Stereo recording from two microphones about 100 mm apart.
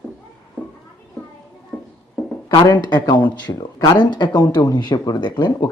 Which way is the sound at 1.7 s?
5° left (ahead or behind).